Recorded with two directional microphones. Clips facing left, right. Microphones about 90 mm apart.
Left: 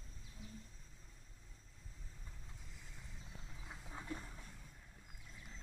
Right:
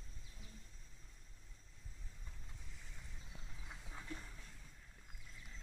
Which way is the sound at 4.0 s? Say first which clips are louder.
Left 4 dB; 20° left (ahead or behind).